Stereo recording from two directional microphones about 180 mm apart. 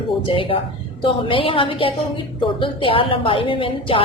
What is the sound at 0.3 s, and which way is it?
A woman's voice, 30° left (ahead or behind).